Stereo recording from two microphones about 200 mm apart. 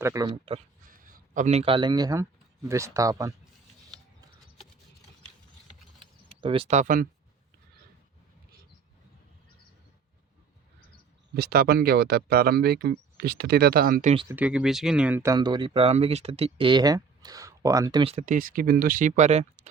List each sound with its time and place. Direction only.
0.0 s speech: 15° right (ahead or behind)
0.9 s a man's voice: 40° right (ahead or behind); by 3.3 s 15° right (ahead or behind)
6.4 s speech: 25° right (ahead or behind); by 7.1 s 40° right (ahead or behind)
11.3 s speech: 50° right (ahead or behind)
14.3 s speech: 10° right (ahead or behind); by 19.6 s 35° right (ahead or behind)